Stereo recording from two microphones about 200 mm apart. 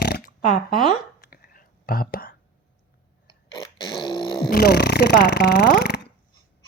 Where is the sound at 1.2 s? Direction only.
45° left (ahead or behind).